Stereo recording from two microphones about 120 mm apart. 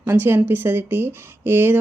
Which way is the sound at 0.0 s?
20° right (ahead or behind).